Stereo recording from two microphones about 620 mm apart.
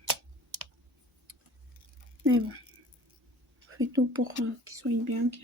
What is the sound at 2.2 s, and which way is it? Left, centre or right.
Speech, centre.